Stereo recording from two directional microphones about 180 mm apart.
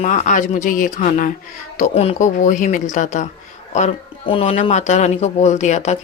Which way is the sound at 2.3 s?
45° left (ahead or behind).